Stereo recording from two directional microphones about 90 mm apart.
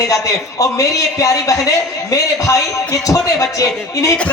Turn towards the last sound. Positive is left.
turn(degrees=35)  # may be behind; listen again after turning